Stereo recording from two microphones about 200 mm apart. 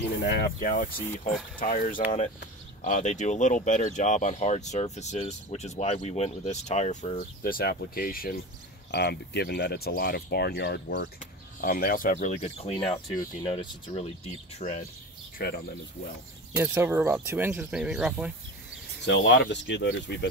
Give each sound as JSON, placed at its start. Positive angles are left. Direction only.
{"t": 0.2, "sound": "speech", "side_deg": 55}
{"t": 2.0, "sound": "speech", "side_deg": 35}
{"t": 12.7, "sound": "speech", "side_deg": 25}
{"t": 15.3, "sound": "speech", "side_deg": 50}
{"t": 16.5, "sound": "speech", "side_deg": -10}
{"t": 19.0, "sound": "speech", "side_deg": 60}